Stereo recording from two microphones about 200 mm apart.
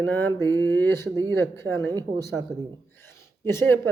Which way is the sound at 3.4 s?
15° left (ahead or behind).